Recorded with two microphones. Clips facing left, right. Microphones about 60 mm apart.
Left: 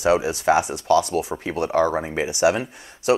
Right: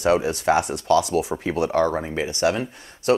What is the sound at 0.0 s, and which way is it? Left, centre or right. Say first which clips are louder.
Speech: left 1 dB; centre.